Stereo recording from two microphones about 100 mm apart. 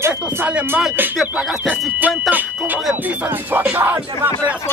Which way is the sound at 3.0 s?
15° right (ahead or behind).